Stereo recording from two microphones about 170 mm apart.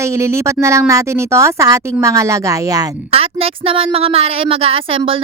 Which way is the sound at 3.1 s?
35° right (ahead or behind).